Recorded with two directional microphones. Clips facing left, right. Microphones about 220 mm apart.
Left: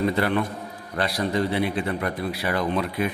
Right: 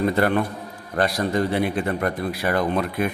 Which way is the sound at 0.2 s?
50° right (ahead or behind).